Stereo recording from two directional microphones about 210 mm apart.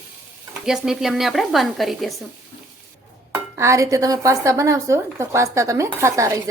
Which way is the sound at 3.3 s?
15° right (ahead or behind).